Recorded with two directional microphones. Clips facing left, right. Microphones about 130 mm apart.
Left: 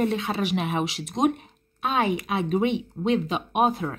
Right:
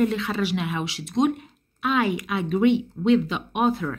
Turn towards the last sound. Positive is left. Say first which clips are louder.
# even
turn(degrees=20)  # may be behind; listen again after turning